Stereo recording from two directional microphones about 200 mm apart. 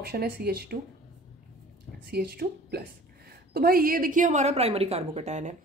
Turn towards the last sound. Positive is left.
turn(degrees=-35)  # may be behind; listen again after turning